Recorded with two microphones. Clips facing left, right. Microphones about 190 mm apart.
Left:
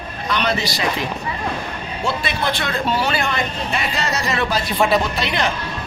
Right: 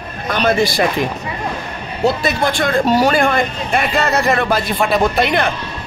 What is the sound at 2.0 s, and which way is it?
Speech, 45° right (ahead or behind).